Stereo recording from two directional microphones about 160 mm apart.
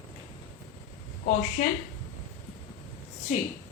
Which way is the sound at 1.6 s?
50° left (ahead or behind).